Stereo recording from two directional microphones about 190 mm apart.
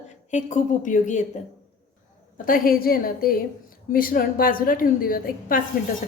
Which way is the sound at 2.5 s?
50° left (ahead or behind).